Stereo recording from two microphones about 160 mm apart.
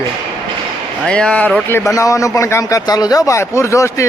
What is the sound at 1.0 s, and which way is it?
Speech, 5° left (ahead or behind).